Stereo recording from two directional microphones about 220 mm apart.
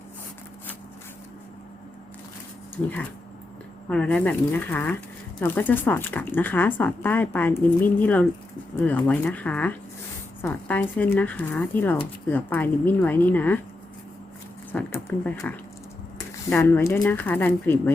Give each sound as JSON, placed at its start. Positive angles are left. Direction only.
{"t": 3.8, "sound": "speech", "side_deg": 5}
{"t": 14.7, "sound": "speech", "side_deg": 10}